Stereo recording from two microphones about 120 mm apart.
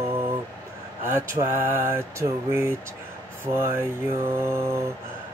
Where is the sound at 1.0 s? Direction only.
20° right (ahead or behind).